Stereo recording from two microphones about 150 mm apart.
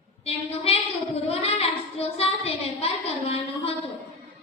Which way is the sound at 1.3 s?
40° left (ahead or behind).